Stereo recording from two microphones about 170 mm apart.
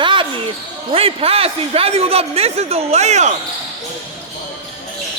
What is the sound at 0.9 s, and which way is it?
A man's voice, 35° right (ahead or behind).